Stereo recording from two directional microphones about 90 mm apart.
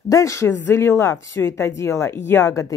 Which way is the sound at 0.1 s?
35° left (ahead or behind).